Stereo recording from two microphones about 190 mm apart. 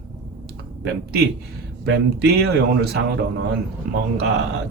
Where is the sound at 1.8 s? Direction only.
60° right (ahead or behind).